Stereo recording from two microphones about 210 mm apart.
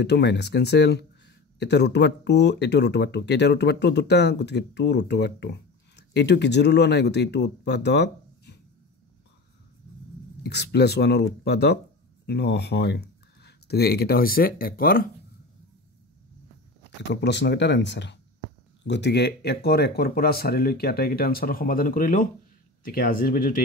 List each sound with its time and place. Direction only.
0.0 s speech: 55° left (ahead or behind)
10.5 s speech: 55° left (ahead or behind)
17.1 s speech: 55° left (ahead or behind)